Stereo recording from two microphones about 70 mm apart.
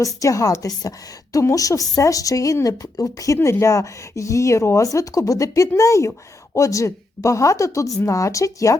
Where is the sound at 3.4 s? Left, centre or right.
Left.